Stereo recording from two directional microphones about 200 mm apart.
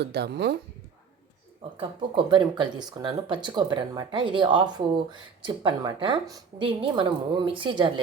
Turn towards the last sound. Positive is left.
turn(degrees=-25)  # may be behind; listen again after turning